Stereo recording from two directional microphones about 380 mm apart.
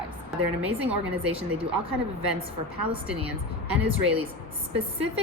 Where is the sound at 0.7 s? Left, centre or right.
Right.